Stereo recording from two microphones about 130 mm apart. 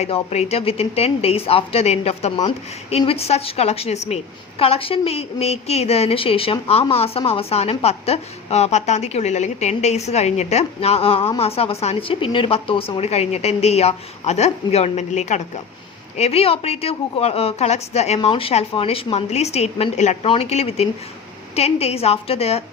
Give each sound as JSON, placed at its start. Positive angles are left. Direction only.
{"t": 0.0, "sound": "a woman's voice", "side_deg": 55}
{"t": 2.5, "sound": "a woman's voice", "side_deg": 45}